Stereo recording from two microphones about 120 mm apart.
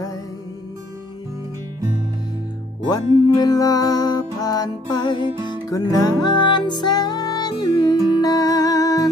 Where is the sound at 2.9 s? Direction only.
30° left (ahead or behind).